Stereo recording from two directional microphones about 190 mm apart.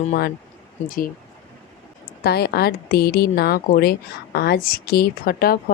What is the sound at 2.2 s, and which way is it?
A woman's voice, 60° left (ahead or behind).